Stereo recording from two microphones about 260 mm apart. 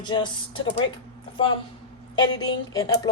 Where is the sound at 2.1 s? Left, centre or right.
Centre.